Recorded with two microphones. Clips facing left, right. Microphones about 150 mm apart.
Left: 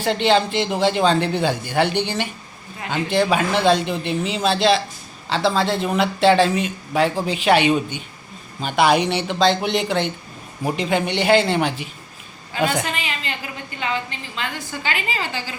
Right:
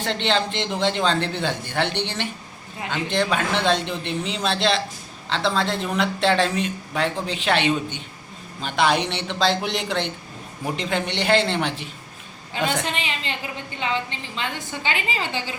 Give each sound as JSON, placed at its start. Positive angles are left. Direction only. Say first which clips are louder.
{"t": 0.0, "sound": "speech", "louder": "left 5 dB", "side_deg": 10}
{"t": 12.8, "sound": "a woman's voice", "louder": "left 1 dB", "side_deg": -25}
{"t": 14.3, "sound": "a woman's voice", "louder": "left 1 dB", "side_deg": -25}